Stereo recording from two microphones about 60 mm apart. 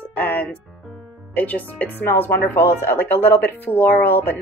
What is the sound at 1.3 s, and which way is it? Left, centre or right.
A woman's voice, left.